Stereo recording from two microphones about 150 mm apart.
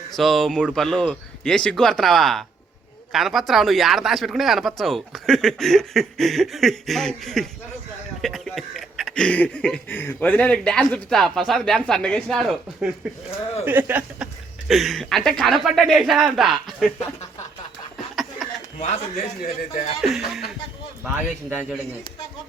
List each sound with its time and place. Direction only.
0.2 s speech: centre (ahead or behind)
13.7 s speech: 10° right (ahead or behind)
14.7 s speech: centre (ahead or behind)
18.4 s chuckle: centre (ahead or behind)
18.8 s speech: 50° left (ahead or behind)
20.0 s speech: centre (ahead or behind)